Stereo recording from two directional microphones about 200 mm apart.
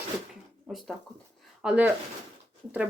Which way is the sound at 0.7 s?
Centre (ahead or behind).